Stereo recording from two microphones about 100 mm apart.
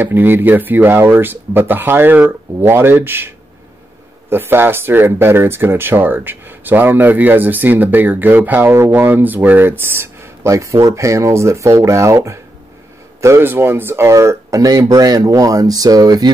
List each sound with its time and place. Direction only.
0.0 s speech: 20° right (ahead or behind); by 16.3 s 40° right (ahead or behind)